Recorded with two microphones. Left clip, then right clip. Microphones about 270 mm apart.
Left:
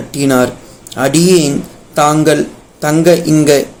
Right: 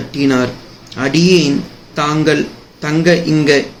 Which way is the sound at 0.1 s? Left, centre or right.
Centre.